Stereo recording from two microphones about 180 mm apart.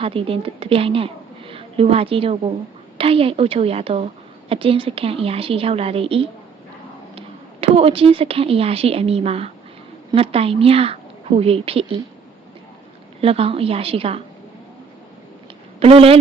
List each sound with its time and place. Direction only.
0.0 s a woman's voice: 30° right (ahead or behind)
13.2 s a woman's voice: 30° right (ahead or behind)
15.8 s a woman's voice: 35° right (ahead or behind)